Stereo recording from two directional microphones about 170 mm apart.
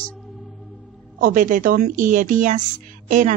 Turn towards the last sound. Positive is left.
turn(degrees=-50)  # may be behind; listen again after turning